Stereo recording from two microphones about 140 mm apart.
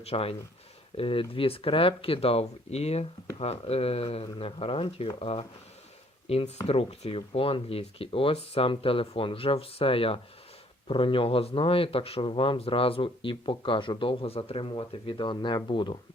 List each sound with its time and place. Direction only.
0.0 s speech: 45° left (ahead or behind)